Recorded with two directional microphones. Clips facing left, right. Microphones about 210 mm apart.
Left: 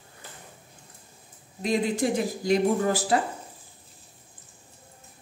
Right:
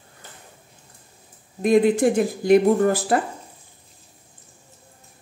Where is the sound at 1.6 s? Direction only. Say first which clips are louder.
Right 9 dB; 55° right (ahead or behind).